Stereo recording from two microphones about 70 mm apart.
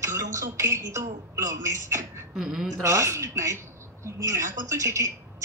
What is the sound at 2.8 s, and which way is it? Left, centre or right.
A man's voice, right.